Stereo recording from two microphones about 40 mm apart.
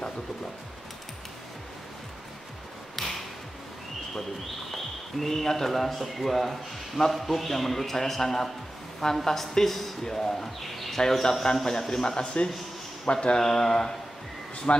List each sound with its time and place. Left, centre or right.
3.0 s music: centre
4.6 s speech: centre
11.9 s speech: centre
13.4 s speech: centre
14.7 s speech: left